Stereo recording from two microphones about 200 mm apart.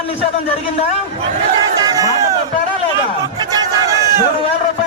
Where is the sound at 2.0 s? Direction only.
15° right (ahead or behind).